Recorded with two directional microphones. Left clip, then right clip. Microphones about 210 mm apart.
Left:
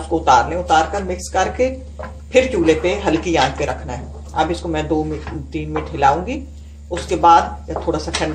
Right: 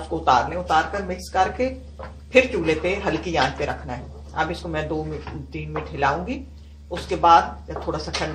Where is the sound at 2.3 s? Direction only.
20° left (ahead or behind).